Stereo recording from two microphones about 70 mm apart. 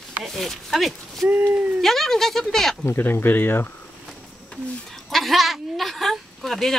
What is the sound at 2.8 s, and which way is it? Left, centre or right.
Speech, left.